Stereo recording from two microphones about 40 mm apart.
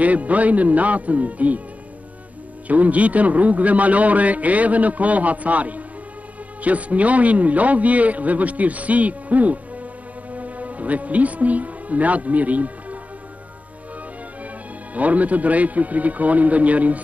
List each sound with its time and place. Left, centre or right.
0.0 s a man's voice: right
2.7 s a man's voice: right
15.0 s a man's voice: right